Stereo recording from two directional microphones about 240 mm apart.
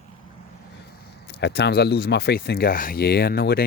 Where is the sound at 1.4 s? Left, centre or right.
Left.